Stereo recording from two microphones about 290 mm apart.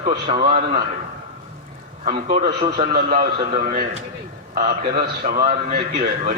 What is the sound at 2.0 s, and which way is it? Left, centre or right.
Speech, right.